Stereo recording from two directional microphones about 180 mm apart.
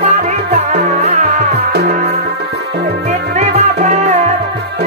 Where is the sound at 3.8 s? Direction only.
40° right (ahead or behind).